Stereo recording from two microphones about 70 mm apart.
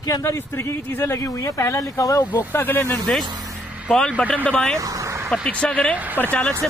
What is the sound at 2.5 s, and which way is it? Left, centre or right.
Speech, left.